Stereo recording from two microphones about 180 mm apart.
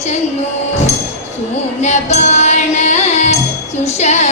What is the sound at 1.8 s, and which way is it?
Music, 40° left (ahead or behind).